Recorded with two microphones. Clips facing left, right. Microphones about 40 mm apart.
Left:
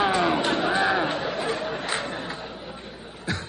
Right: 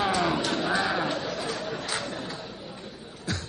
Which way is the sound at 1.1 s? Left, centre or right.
Left.